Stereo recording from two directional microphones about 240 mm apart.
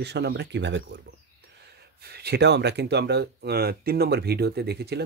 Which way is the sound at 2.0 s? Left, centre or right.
Right.